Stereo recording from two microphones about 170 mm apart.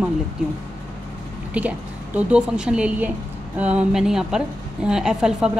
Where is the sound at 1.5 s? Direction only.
10° right (ahead or behind).